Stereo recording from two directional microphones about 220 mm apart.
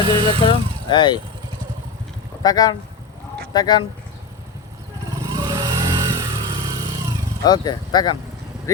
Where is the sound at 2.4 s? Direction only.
15° left (ahead or behind).